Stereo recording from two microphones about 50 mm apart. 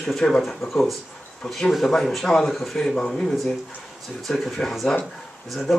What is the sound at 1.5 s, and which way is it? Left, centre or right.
Speech, centre.